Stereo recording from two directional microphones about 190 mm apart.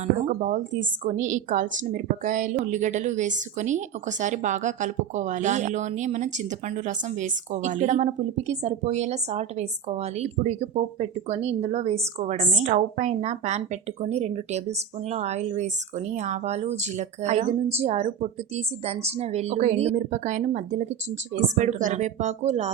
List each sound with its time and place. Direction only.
0.2 s a woman's voice: 40° right (ahead or behind)